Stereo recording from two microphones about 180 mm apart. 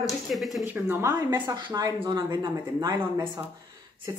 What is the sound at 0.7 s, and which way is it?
Speech, 10° right (ahead or behind).